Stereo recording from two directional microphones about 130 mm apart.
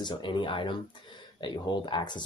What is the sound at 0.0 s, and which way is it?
Speech, 35° left (ahead or behind).